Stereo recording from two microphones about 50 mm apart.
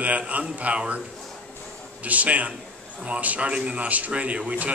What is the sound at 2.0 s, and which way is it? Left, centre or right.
A man's voice, right.